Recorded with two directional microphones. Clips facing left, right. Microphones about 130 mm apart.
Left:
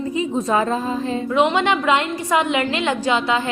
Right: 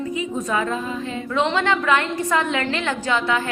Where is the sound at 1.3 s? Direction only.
15° left (ahead or behind).